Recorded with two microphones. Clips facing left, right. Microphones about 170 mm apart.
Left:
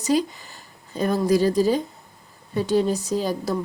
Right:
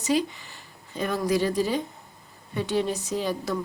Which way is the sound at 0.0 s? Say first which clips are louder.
Left 3 dB; 40° left (ahead or behind).